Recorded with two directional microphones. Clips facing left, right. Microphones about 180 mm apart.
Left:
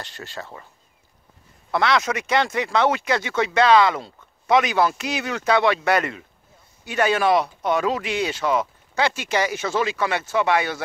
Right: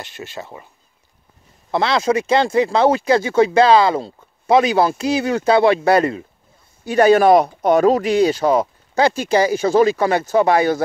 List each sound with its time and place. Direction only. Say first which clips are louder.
0.0 s speech: right 4 dB; 15° right (ahead or behind)
1.7 s speech: right 4 dB; 30° right (ahead or behind)